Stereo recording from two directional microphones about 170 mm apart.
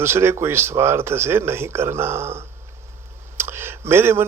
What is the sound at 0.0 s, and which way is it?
Speech, 15° right (ahead or behind).